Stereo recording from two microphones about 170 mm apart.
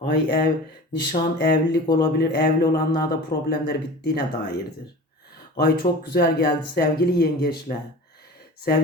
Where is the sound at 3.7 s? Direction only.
75° left (ahead or behind).